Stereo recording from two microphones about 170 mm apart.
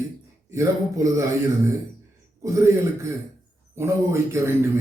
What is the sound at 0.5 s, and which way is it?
Speech, 20° right (ahead or behind).